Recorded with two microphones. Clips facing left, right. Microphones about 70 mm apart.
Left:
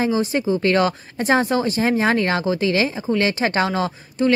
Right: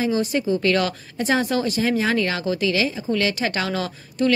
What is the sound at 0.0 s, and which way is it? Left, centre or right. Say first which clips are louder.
A woman's voice: left 2 dB; left.